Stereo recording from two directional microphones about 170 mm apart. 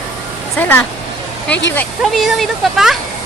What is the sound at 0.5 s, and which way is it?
Speech, 10° left (ahead or behind).